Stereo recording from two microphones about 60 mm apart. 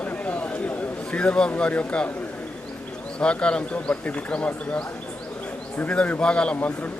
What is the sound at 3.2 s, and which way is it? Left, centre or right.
Speech, centre.